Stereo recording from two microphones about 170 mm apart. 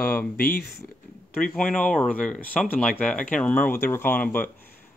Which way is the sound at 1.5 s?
5° left (ahead or behind).